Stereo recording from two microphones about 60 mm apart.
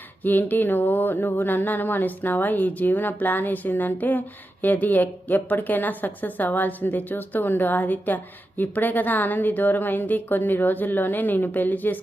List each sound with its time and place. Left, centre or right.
0.3 s a woman's voice: left